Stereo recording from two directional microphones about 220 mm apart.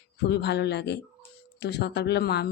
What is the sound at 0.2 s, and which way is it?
Speech, 50° left (ahead or behind).